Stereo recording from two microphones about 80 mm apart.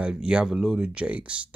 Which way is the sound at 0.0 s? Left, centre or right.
Centre.